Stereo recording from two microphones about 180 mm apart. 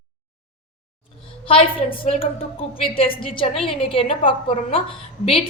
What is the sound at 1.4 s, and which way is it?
A woman's voice, 30° left (ahead or behind).